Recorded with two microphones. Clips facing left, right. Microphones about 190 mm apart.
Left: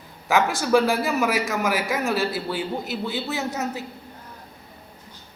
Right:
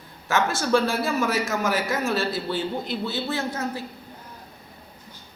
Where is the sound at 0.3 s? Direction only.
15° left (ahead or behind).